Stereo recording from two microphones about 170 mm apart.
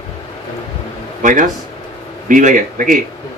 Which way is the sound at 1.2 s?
50° right (ahead or behind).